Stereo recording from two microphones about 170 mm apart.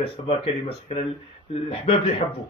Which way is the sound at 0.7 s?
35° left (ahead or behind).